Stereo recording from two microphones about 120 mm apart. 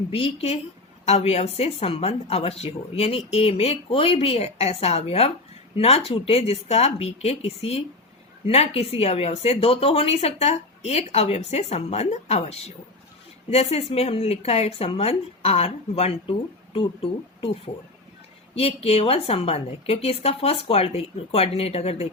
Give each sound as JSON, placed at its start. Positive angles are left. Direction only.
{"t": 0.1, "sound": "speech", "side_deg": 55}